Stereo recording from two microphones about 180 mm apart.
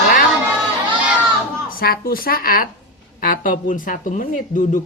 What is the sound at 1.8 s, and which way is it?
Speech, 55° left (ahead or behind).